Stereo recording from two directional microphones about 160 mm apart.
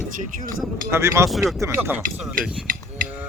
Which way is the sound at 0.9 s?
15° right (ahead or behind).